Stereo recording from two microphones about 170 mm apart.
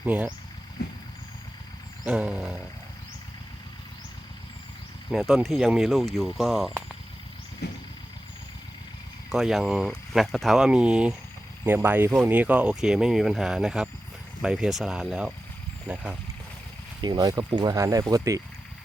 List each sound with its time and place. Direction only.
0.0 s speech: 10° right (ahead or behind)
2.0 s speech: 5° right (ahead or behind)
5.1 s speech: centre (ahead or behind)
7.6 s vehicle: 85° left
9.3 s speech: centre (ahead or behind)
17.0 s speech: 25° right (ahead or behind)